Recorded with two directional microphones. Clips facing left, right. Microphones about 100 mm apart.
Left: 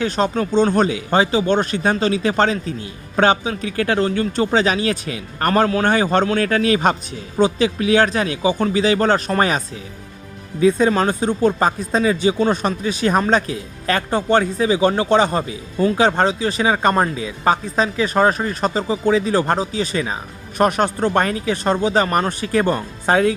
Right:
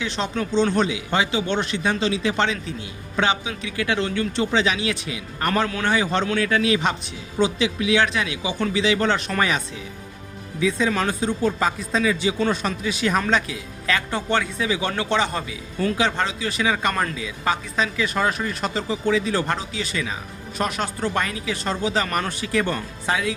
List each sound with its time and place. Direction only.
0.0 s speech: 45° left (ahead or behind)